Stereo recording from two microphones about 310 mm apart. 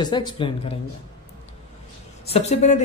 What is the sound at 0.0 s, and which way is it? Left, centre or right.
Speech, centre.